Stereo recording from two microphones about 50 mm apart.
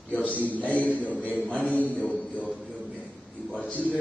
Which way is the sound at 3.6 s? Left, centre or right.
Left.